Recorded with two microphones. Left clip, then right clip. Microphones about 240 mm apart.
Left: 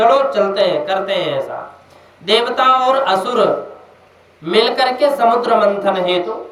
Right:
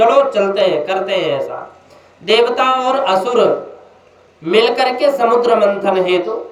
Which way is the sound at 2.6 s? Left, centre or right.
Centre.